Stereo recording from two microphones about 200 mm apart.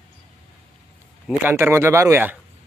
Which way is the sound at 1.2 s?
10° right (ahead or behind).